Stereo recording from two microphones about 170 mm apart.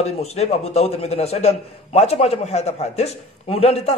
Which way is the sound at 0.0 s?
40° left (ahead or behind).